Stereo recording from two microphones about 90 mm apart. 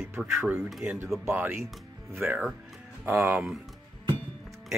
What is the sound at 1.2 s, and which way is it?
Speech, 25° right (ahead or behind).